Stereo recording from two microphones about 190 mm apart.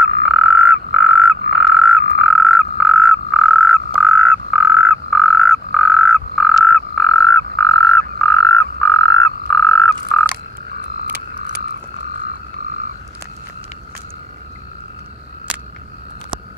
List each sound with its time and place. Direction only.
0.2 s frog: centre (ahead or behind)